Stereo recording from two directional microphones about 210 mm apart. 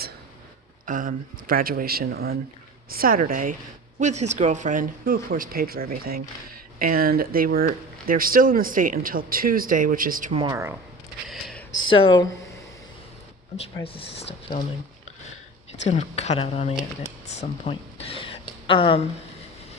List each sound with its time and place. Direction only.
0.9 s speech: 40° right (ahead or behind)
10.3 s speech: 15° right (ahead or behind)
11.3 s a sound: centre (ahead or behind)
11.9 s speech: 25° left (ahead or behind)
13.7 s speech: 25° left (ahead or behind)
15.8 s speech: 30° left (ahead or behind)